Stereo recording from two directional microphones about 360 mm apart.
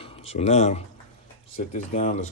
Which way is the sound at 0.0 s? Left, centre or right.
Centre.